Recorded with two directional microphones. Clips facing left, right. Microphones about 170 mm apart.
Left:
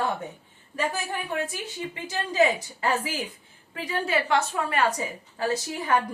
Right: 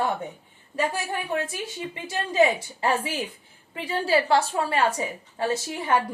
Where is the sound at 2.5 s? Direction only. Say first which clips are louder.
Right 2 dB; 30° right (ahead or behind).